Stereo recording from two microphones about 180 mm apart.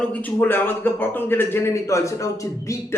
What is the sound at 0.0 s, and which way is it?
A man's voice, 10° left (ahead or behind).